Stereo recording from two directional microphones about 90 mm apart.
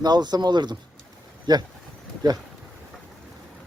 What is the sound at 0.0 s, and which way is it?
Speech, 50° right (ahead or behind).